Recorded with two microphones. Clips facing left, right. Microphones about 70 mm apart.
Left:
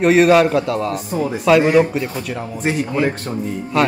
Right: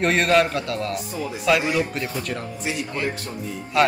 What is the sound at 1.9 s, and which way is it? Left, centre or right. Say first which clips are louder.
Speech: left 5 dB; centre.